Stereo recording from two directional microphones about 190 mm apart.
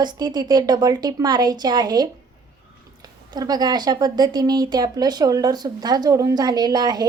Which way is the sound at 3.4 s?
20° right (ahead or behind).